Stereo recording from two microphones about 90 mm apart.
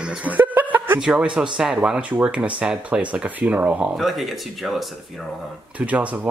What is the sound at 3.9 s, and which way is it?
Speech, centre (ahead or behind).